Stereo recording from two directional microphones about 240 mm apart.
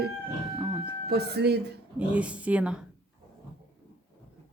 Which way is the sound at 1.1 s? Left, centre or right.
Right.